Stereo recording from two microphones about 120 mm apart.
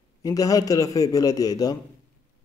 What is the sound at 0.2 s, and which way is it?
A man's voice, 30° left (ahead or behind).